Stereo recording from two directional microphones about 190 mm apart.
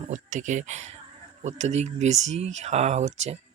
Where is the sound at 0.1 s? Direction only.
40° right (ahead or behind).